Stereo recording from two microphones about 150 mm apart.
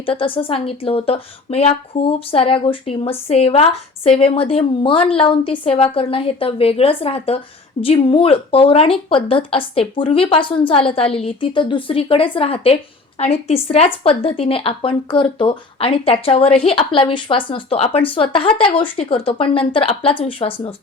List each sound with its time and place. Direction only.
0.0 s a woman's voice: 35° left (ahead or behind)